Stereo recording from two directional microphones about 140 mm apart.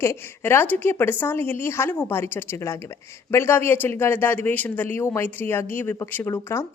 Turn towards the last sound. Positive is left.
turn(degrees=20)  # may be behind; listen again after turning